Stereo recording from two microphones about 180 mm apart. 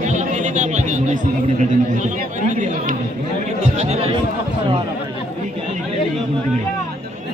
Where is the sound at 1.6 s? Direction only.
45° right (ahead or behind).